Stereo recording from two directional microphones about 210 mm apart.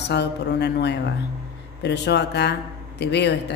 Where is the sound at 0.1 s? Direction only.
55° left (ahead or behind).